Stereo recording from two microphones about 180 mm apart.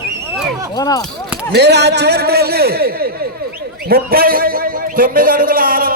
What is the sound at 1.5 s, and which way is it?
A man's voice, 70° right (ahead or behind).